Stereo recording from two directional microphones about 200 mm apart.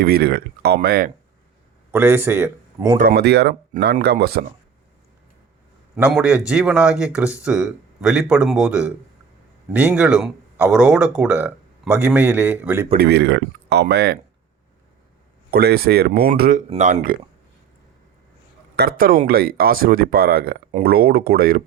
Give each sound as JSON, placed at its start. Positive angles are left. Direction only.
{"t": 0.0, "sound": "speech", "side_deg": -50}
{"t": 1.9, "sound": "speech", "side_deg": -10}
{"t": 3.0, "sound": "speech", "side_deg": -50}
{"t": 6.0, "sound": "speech", "side_deg": -5}
{"t": 13.0, "sound": "speech", "side_deg": -55}
{"t": 15.4, "sound": "speech", "side_deg": -50}
{"t": 18.8, "sound": "speech", "side_deg": -50}